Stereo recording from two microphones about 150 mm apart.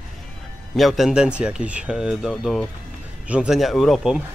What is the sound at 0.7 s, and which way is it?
Speech, centre (ahead or behind).